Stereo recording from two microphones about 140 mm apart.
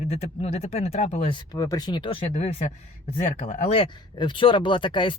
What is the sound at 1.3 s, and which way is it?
Speech, 30° left (ahead or behind).